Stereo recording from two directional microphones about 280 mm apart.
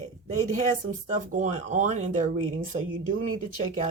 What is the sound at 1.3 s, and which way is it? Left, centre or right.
Speech, right.